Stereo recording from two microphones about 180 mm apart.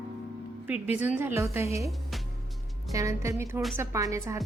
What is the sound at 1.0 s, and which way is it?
Speech, 10° right (ahead or behind).